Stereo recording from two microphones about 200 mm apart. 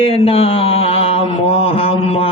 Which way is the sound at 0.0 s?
30° left (ahead or behind).